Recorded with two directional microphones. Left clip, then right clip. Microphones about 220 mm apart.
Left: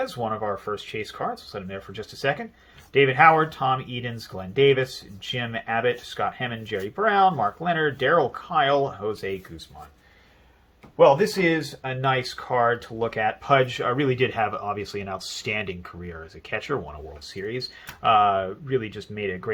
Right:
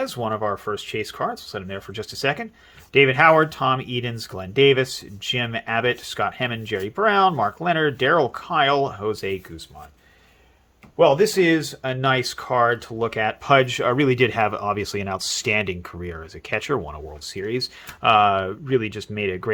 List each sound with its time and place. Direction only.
0.0 s speech: 50° right (ahead or behind)
10.9 s speech: 50° right (ahead or behind)